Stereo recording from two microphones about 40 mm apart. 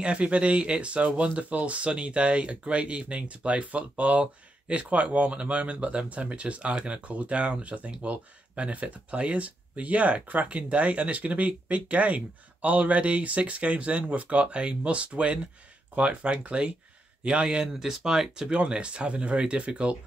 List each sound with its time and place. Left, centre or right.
0.0 s speech: right
18.5 s speech: right